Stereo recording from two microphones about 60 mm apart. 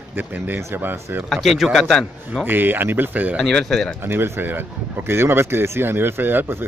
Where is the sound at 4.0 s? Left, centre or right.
Right.